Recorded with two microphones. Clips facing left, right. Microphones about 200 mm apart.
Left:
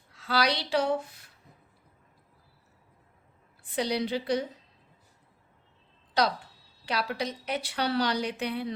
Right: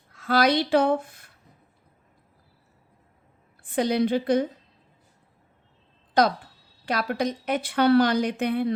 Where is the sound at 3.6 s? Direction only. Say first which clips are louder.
Right 6 dB; 50° right (ahead or behind).